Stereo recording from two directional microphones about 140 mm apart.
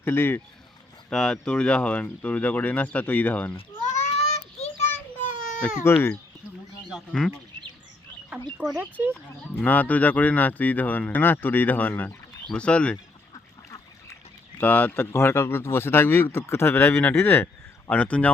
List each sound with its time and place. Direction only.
0.0 s speech: 15° left (ahead or behind)
1.1 s speech: 5° left (ahead or behind)
3.8 s child singing: 55° left (ahead or behind)
4.8 s child singing: 15° left (ahead or behind)
5.3 s baby cry: 65° left (ahead or behind)
5.8 s speech: 20° left (ahead or behind)
6.9 s speech: 5° left (ahead or behind)
8.5 s speech: 10° right (ahead or behind)
9.1 s speech: 10° left (ahead or behind)
14.6 s speech: 15° left (ahead or behind)